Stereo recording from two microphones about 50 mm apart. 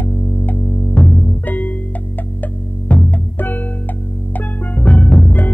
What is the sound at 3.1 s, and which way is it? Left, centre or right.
Music, left.